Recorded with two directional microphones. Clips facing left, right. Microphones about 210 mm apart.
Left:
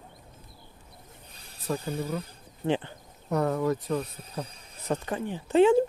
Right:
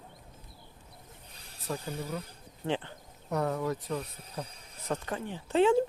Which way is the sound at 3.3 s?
80° left.